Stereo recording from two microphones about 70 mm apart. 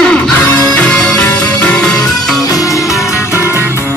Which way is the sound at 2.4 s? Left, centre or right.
Left.